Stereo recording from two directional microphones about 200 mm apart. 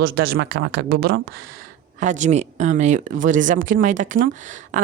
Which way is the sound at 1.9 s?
35° right (ahead or behind).